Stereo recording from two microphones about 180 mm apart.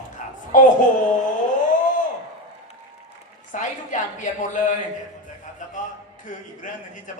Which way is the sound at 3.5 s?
45° left (ahead or behind).